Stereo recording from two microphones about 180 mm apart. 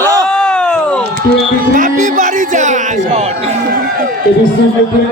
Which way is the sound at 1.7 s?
45° right (ahead or behind).